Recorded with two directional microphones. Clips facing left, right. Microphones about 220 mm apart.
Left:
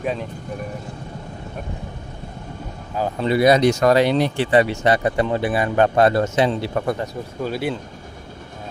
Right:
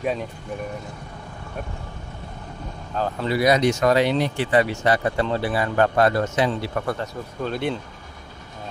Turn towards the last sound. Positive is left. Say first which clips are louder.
# left 1 dB
turn(degrees=5)  # may be behind; listen again after turning